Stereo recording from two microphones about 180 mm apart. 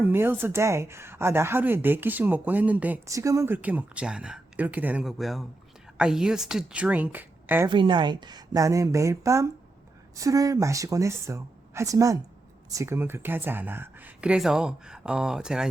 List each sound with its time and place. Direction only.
0.0 s a woman's voice: 10° right (ahead or behind)
7.7 s a woman's voice: 25° right (ahead or behind); by 15.6 s 5° right (ahead or behind)